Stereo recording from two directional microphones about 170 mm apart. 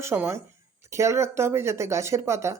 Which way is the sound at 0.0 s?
15° right (ahead or behind).